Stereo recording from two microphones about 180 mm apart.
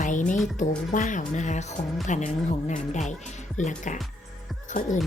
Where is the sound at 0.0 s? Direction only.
45° left (ahead or behind).